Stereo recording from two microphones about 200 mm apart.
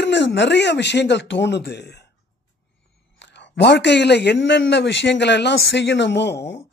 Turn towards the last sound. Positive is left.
turn(degrees=60)  # may be behind; listen again after turning